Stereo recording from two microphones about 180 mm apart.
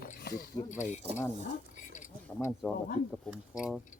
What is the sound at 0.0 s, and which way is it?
Speech, 55° left (ahead or behind).